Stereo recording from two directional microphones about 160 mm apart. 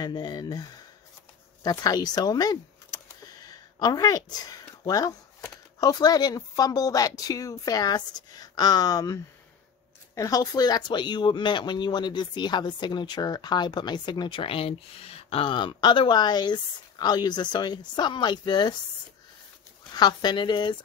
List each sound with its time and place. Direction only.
0.0 s speech: 25° left (ahead or behind)
19.9 s speech: 25° left (ahead or behind)